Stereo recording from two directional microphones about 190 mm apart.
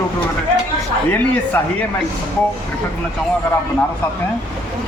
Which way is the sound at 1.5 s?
10° left (ahead or behind).